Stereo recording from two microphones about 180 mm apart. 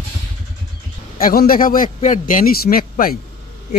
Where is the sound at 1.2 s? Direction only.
55° left (ahead or behind).